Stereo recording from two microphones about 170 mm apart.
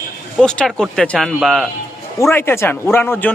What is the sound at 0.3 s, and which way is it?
A man's voice, 5° left (ahead or behind).